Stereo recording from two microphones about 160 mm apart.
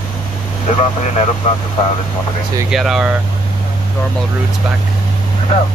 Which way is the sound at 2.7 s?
5° right (ahead or behind).